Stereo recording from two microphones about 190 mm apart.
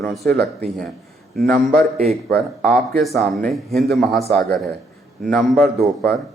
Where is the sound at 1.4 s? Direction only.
Centre (ahead or behind).